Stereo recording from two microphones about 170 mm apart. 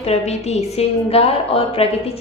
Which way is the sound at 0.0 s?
40° left (ahead or behind).